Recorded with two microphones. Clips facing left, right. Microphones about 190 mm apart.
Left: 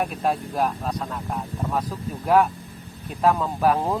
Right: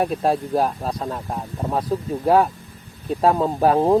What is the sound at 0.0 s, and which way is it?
Speech, 30° right (ahead or behind).